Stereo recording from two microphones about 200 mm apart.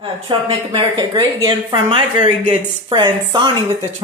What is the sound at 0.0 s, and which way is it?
Speech, 25° right (ahead or behind).